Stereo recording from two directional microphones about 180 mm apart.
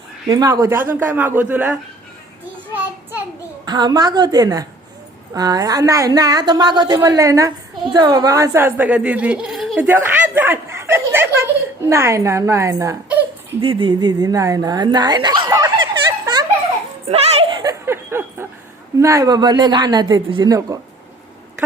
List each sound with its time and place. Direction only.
0.3 s speech: 20° right (ahead or behind)
2.7 s a sound: 10° right (ahead or behind)
3.7 s a woman's voice: 25° right (ahead or behind); by 9.8 s centre (ahead or behind)
9.8 s chuckle: 10° right (ahead or behind)
11.9 s speech: 15° right (ahead or behind)
13.6 s speech: 30° right (ahead or behind)
17.1 s a sound: 35° right (ahead or behind)
17.6 s a sound: 15° right (ahead or behind)
18.9 s a woman's voice: 15° right (ahead or behind)